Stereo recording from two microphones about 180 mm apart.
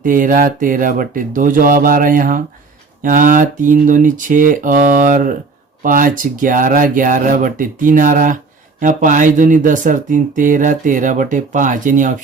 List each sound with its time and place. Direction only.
0.0 s speech: 50° right (ahead or behind)